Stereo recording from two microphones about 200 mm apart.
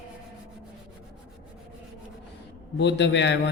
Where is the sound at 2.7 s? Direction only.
60° left (ahead or behind).